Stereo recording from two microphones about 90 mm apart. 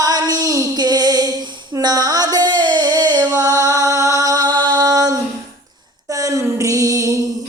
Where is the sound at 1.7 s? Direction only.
45° right (ahead or behind).